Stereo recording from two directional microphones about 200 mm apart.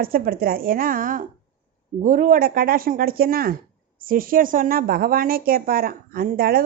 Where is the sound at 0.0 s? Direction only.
45° right (ahead or behind).